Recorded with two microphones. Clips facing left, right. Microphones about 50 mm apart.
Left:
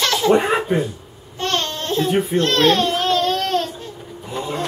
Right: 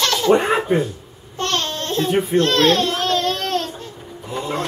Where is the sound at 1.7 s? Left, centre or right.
Centre.